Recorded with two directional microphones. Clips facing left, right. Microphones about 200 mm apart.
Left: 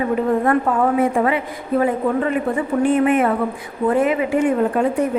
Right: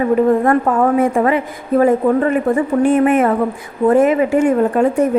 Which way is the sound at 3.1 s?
45° right (ahead or behind).